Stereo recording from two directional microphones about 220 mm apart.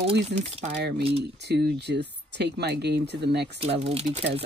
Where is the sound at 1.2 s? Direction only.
50° right (ahead or behind).